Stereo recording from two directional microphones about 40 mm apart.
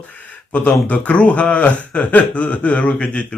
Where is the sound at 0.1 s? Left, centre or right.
Left.